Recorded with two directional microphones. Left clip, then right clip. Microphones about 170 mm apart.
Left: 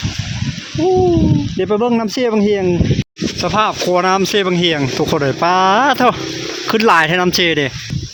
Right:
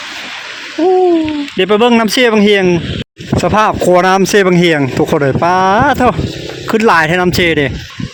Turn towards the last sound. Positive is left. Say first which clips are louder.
# right 3 dB
turn(degrees=-15)  # may be behind; listen again after turning